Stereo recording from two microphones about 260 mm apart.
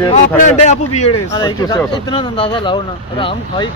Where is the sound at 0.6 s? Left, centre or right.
Left.